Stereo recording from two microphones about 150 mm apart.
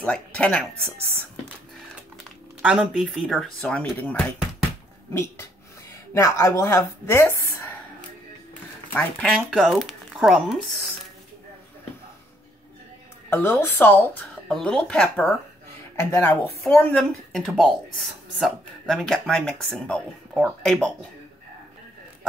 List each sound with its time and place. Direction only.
0.0 s speech: 5° left (ahead or behind)
2.6 s a woman's voice: 5° right (ahead or behind); by 7.8 s 20° left (ahead or behind)
8.9 s speech: 5° left (ahead or behind)
13.3 s speech: 15° left (ahead or behind)